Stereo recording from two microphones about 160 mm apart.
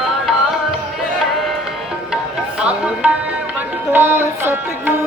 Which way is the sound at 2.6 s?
5° right (ahead or behind).